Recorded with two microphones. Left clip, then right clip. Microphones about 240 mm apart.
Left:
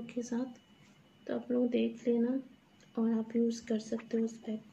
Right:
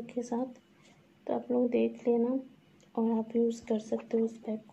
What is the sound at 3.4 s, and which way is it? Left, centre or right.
A woman's voice, centre.